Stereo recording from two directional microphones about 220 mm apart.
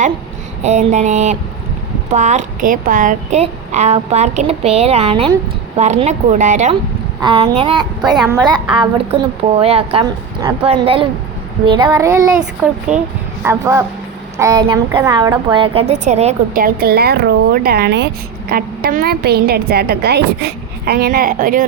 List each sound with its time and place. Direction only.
0.6 s a woman's voice: 30° right (ahead or behind)
7.2 s a woman's voice: 25° right (ahead or behind)
11.6 s child singing: 20° right (ahead or behind)
12.9 s speech: 5° right (ahead or behind)
13.4 s child singing: 10° right (ahead or behind)
14.3 s a woman's voice: 15° right (ahead or behind); by 16.6 s 30° right (ahead or behind)
16.6 s speech: 45° right (ahead or behind)